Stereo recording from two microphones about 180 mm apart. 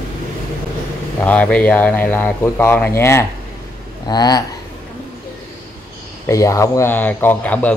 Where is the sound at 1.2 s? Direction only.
5° left (ahead or behind).